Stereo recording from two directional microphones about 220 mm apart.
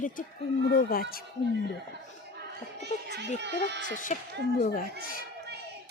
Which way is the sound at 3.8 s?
35° left (ahead or behind).